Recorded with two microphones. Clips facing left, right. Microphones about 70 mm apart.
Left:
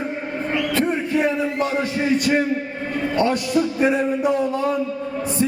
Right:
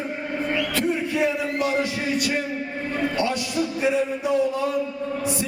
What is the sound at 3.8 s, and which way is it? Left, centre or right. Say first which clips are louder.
Music: left 4 dB; left.